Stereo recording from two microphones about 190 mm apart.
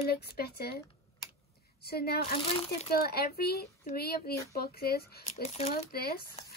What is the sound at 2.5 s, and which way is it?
Speech, 30° left (ahead or behind).